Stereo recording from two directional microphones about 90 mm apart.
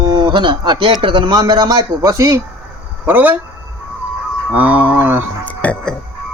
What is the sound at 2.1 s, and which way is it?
Speech, 35° right (ahead or behind).